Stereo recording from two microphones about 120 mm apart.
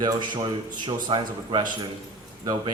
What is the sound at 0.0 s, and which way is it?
Speech, 40° right (ahead or behind).